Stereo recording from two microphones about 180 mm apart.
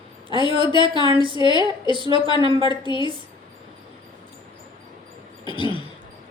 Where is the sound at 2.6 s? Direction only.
25° left (ahead or behind).